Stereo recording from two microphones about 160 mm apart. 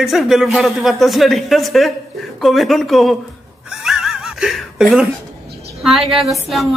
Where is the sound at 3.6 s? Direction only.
Centre (ahead or behind).